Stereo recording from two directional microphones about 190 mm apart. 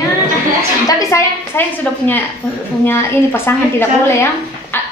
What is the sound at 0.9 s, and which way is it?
A woman's voice, 15° left (ahead or behind).